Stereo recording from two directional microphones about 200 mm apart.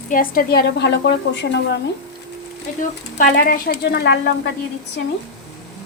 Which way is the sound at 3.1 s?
45° left (ahead or behind).